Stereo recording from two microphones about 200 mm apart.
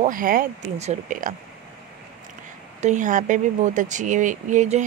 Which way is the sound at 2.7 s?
35° right (ahead or behind).